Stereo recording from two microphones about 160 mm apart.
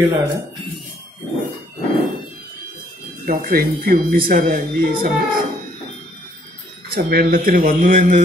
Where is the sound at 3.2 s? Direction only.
65° right (ahead or behind).